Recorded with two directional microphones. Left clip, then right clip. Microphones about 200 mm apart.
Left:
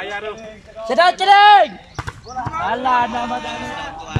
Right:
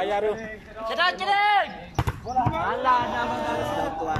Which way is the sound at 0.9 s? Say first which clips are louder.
Left 11 dB; 40° left (ahead or behind).